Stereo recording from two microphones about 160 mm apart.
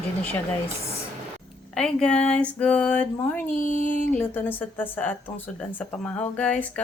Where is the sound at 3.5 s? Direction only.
55° left (ahead or behind).